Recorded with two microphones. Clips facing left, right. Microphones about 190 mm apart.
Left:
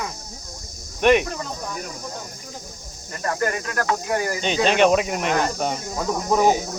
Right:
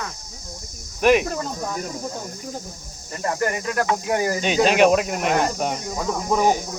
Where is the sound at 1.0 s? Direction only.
Centre (ahead or behind).